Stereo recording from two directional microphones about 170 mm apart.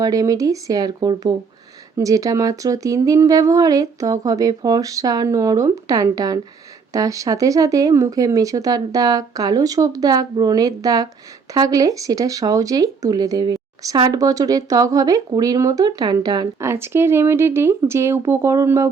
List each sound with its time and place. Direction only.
0.0 s speech: 20° right (ahead or behind)